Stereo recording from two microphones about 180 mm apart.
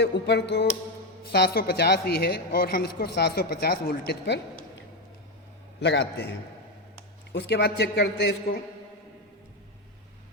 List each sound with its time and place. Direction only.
0.0 s a man's voice: 70° left (ahead or behind)
5.8 s a man's voice: 75° left (ahead or behind)
7.3 s a man's voice: 70° left (ahead or behind)